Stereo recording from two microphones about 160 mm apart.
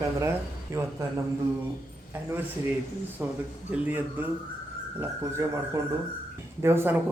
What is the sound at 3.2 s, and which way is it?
Speech, 10° right (ahead or behind).